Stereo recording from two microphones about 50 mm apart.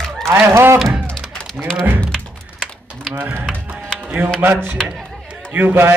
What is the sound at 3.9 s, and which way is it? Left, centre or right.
Music, centre.